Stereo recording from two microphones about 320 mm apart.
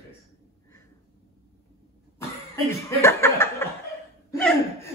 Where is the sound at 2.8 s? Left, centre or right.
Centre.